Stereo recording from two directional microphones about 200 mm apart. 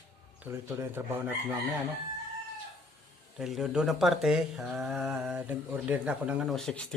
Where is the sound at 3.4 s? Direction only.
Centre (ahead or behind).